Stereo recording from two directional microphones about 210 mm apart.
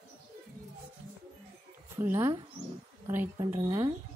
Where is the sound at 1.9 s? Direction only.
10° right (ahead or behind).